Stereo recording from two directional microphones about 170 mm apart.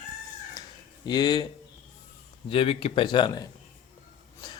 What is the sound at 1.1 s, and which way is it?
Speech, 25° left (ahead or behind).